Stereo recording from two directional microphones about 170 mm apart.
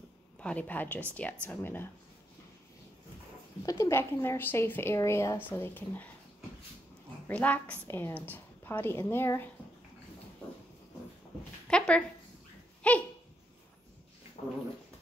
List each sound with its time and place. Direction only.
0.4 s a woman's voice: 5° left (ahead or behind)
3.6 s a woman's voice: 15° left (ahead or behind)
7.2 s a woman's voice: 10° left (ahead or behind)
11.6 s a sound: 5° left (ahead or behind)
12.8 s dog: 5° left (ahead or behind)
14.4 s dog: 45° left (ahead or behind)